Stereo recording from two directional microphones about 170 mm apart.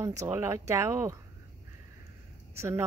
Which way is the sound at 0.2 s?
15° right (ahead or behind).